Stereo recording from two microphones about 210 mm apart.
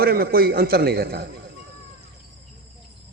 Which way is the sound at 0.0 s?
45° right (ahead or behind).